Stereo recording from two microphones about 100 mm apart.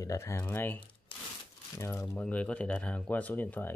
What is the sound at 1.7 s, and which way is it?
Speech, 25° left (ahead or behind).